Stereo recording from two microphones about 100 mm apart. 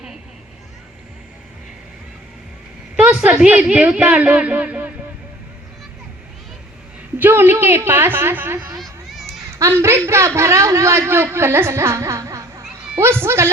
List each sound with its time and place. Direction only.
2.9 s a woman's voice: 10° right (ahead or behind)
7.2 s a woman's voice: 20° right (ahead or behind)
8.8 s children playing: centre (ahead or behind)
9.6 s a man's voice: 30° right (ahead or behind)